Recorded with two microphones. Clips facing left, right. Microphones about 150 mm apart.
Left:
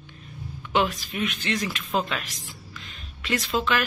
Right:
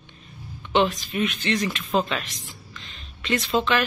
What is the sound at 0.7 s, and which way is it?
Speech, 5° left (ahead or behind).